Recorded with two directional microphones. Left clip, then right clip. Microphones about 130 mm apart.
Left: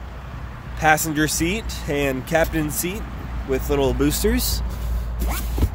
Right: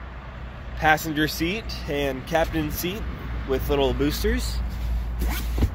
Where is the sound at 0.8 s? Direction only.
50° left (ahead or behind).